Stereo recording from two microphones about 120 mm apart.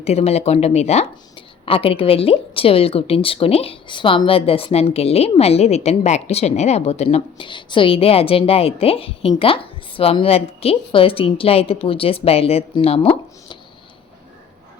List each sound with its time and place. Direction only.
0.0 s speech: 60° left (ahead or behind)
1.4 s a woman's voice: 50° left (ahead or behind)